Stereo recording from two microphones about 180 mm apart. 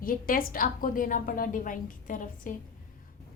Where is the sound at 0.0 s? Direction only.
50° left (ahead or behind).